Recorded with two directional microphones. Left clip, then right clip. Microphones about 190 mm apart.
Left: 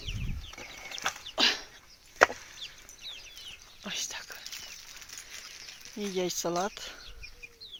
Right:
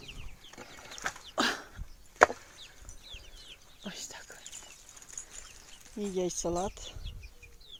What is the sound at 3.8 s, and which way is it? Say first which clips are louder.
Whispering: left 7 dB; 20° right (ahead or behind).